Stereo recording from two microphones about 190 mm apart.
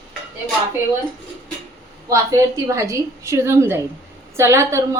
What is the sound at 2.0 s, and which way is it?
A woman's voice, 15° right (ahead or behind).